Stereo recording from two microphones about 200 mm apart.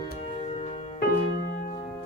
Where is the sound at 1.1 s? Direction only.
50° left (ahead or behind).